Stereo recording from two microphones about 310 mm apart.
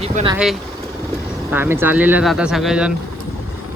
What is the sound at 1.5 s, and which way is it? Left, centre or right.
Speech, centre.